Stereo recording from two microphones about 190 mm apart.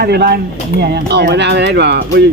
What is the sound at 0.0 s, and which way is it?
Speech, 55° right (ahead or behind).